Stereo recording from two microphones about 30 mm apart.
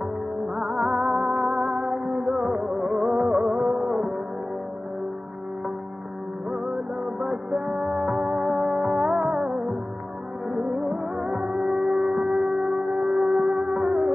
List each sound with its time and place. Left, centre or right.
0.7 s music: centre
7.5 s music: right
11.5 s shofar: centre
13.2 s music: centre